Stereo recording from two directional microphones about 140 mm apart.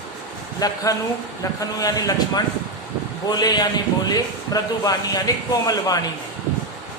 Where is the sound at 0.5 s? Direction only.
25° left (ahead or behind).